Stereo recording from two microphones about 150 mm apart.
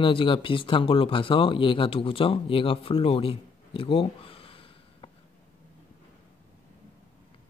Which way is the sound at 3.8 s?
35° left (ahead or behind).